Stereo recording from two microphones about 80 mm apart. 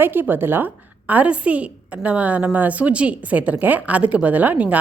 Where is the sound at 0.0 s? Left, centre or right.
Right.